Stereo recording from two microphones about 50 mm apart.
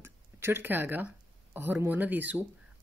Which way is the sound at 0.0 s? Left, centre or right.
Right.